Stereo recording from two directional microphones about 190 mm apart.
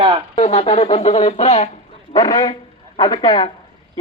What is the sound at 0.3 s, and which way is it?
A man's voice, 30° left (ahead or behind).